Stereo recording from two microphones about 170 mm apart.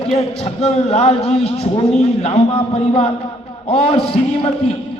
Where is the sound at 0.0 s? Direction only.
35° left (ahead or behind).